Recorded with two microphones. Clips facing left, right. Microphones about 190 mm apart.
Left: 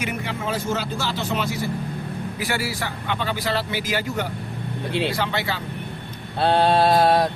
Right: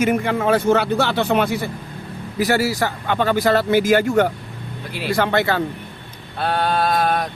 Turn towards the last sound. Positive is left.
turn(degrees=30)  # may be behind; listen again after turning